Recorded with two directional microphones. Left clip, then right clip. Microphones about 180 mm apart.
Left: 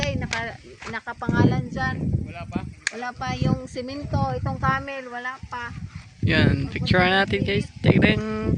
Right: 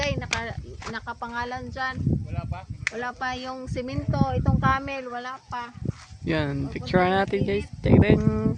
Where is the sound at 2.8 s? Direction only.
40° left (ahead or behind).